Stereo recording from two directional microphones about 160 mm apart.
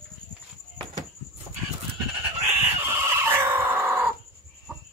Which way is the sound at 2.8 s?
15° right (ahead or behind).